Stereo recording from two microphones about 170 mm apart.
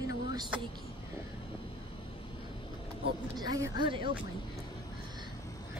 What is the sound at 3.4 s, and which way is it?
Speech, 25° right (ahead or behind).